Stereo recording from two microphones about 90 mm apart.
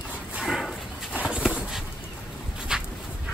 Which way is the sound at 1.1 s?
10° right (ahead or behind).